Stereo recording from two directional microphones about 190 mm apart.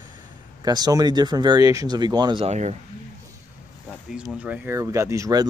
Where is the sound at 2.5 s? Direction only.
35° right (ahead or behind).